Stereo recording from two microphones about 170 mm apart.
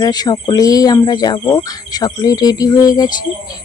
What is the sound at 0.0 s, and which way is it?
Speech, 25° left (ahead or behind).